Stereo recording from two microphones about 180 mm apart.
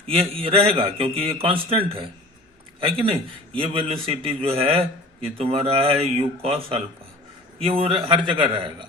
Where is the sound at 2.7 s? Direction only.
30° right (ahead or behind).